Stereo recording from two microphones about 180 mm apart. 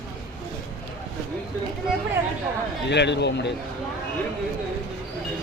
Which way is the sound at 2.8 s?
75° left (ahead or behind).